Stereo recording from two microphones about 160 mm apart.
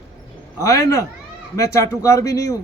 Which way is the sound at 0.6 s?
20° left (ahead or behind).